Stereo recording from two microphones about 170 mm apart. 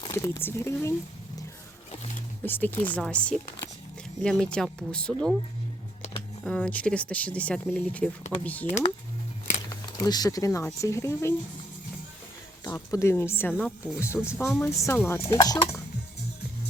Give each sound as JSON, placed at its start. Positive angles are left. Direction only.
{"t": 0.0, "sound": "speech", "side_deg": 15}
{"t": 2.4, "sound": "speech", "side_deg": 10}
{"t": 6.4, "sound": "speech", "side_deg": 5}
{"t": 8.6, "sound": "speech", "side_deg": 40}
{"t": 9.6, "sound": "speech", "side_deg": 25}
{"t": 12.6, "sound": "speech", "side_deg": 15}